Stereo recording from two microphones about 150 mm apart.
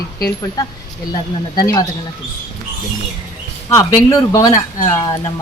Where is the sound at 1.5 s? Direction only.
25° left (ahead or behind).